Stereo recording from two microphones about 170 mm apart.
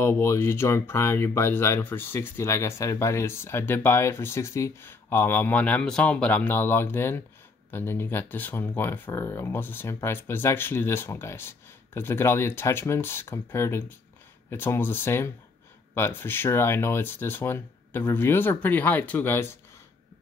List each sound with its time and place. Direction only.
0.0 s speech: 15° left (ahead or behind)